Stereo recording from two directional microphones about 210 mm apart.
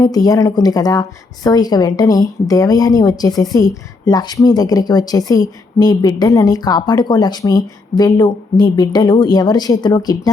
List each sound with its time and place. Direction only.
0.0 s a woman's voice: 15° left (ahead or behind)